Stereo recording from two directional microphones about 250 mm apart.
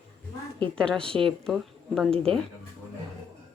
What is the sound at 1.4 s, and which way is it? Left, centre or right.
Speech, centre.